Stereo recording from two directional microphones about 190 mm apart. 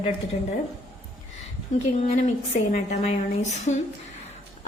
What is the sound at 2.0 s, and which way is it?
A woman's voice, 35° left (ahead or behind).